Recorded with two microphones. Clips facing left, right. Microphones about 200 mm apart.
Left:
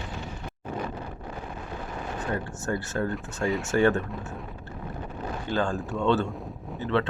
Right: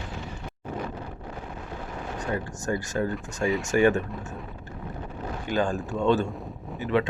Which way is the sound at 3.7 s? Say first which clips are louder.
Right 1 dB; 15° right (ahead or behind).